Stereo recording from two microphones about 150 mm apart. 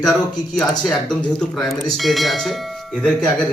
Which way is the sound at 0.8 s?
5° left (ahead or behind).